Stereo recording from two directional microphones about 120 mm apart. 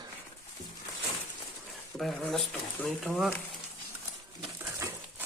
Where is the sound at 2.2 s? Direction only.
Centre (ahead or behind).